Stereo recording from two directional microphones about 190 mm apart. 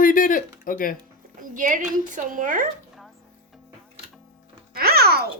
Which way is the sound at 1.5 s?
45° right (ahead or behind).